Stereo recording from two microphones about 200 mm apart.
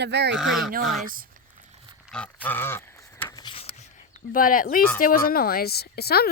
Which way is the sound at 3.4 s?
30° left (ahead or behind).